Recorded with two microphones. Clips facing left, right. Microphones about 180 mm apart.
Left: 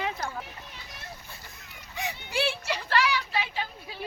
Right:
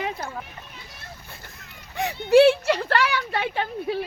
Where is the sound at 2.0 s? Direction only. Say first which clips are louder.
Right 16 dB; 65° right (ahead or behind).